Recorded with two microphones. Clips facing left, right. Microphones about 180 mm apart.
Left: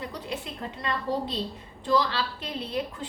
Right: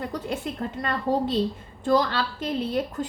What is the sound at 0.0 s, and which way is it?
A woman's voice, 45° right (ahead or behind).